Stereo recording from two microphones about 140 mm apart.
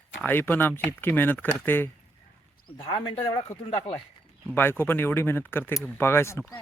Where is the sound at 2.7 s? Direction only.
35° left (ahead or behind).